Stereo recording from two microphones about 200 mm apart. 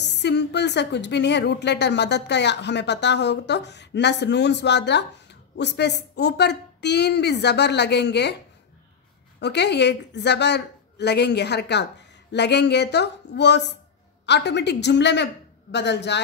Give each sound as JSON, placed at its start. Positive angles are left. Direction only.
{"t": 0.0, "sound": "a woman's voice", "side_deg": 60}
{"t": 9.4, "sound": "a woman's voice", "side_deg": 55}